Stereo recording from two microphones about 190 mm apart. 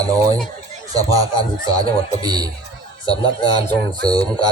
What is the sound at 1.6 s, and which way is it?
Speech, 20° right (ahead or behind).